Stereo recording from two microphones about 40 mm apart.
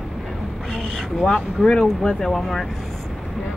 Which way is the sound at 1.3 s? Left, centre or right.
Left.